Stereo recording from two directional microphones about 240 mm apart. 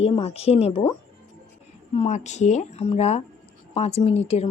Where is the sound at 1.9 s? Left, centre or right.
Left.